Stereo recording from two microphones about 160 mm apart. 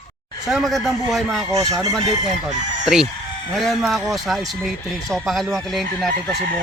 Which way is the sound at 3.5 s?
Centre (ahead or behind).